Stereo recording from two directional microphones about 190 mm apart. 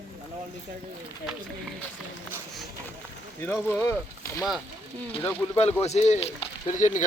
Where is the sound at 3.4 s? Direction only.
10° left (ahead or behind).